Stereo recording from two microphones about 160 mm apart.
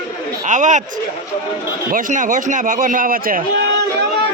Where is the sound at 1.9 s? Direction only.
55° right (ahead or behind).